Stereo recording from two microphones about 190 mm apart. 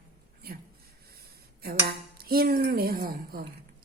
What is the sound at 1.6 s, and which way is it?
Speech, 55° right (ahead or behind).